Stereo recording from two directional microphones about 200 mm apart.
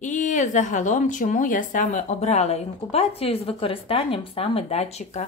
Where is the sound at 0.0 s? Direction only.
40° left (ahead or behind).